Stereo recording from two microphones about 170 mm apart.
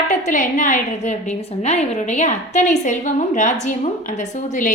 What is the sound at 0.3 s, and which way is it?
A woman's voice, 45° left (ahead or behind).